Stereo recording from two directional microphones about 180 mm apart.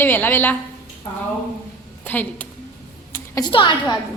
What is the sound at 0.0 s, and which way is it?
Speech, 10° left (ahead or behind).